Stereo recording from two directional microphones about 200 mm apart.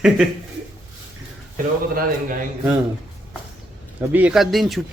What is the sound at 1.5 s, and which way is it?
Speech, 45° right (ahead or behind).